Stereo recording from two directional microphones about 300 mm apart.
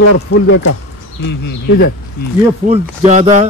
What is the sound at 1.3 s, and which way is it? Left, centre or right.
Speech, left.